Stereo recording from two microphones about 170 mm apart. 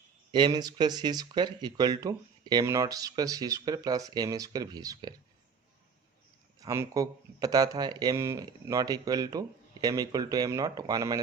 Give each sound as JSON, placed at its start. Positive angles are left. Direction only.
{"t": 0.3, "sound": "speech", "side_deg": -25}
{"t": 6.6, "sound": "speech", "side_deg": -20}